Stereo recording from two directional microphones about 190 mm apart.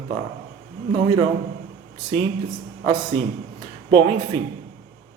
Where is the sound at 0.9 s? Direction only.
25° right (ahead or behind).